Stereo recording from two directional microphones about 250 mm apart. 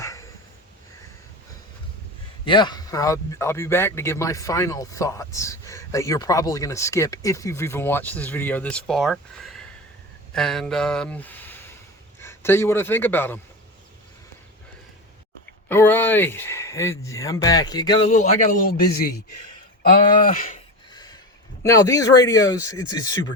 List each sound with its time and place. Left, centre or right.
0.0 s a sound: centre
2.4 s a man's voice: centre
15.7 s speech: centre
18.1 s speech: left
20.3 s speech: left
20.9 s a sound: centre
21.6 s speech: centre